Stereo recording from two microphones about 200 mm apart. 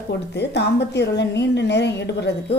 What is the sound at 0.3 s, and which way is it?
A woman's voice, 55° left (ahead or behind).